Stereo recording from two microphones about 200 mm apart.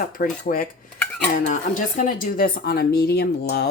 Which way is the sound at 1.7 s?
40° left (ahead or behind).